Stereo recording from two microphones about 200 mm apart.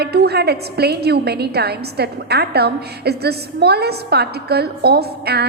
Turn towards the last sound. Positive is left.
turn(degrees=-55)  # may be behind; listen again after turning